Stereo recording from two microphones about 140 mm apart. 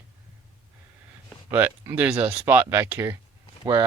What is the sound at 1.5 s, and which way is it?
Speech, 15° right (ahead or behind).